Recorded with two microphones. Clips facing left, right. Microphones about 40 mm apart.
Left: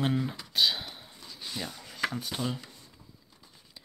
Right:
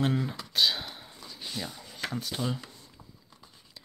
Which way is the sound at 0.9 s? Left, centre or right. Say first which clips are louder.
Right 2 dB; centre.